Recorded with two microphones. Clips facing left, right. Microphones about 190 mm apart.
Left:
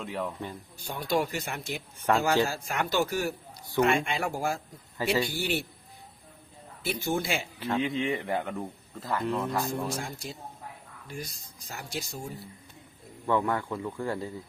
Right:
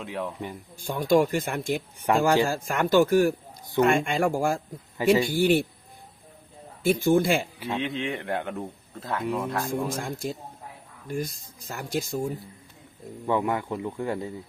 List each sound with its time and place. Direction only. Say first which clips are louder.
0.0 s a man's voice: right 1 dB; centre (ahead or behind)
0.8 s speech: right 7 dB; 45° right (ahead or behind)
2.1 s speech: right 3 dB; 15° right (ahead or behind)
2.6 s speech: right 8 dB; 50° right (ahead or behind)
6.8 s speech: right 9 dB; 50° right (ahead or behind)
7.8 s a man's voice: left 2 dB; centre (ahead or behind)
10.0 s speech: right 6 dB; 50° right (ahead or behind)
13.2 s speech: right 2 dB; 15° right (ahead or behind)